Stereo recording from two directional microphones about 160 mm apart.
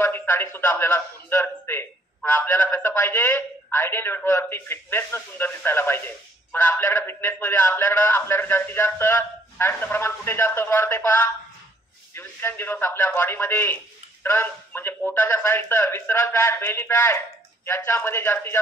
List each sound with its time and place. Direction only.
0.0 s a man's voice: 15° left (ahead or behind)